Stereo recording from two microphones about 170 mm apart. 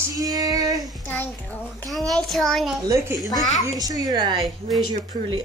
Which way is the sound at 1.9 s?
Centre (ahead or behind).